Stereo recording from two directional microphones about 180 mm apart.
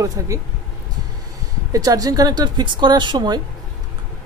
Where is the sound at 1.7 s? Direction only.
20° right (ahead or behind).